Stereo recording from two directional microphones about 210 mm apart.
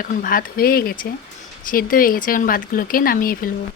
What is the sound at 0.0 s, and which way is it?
Speech, 40° left (ahead or behind).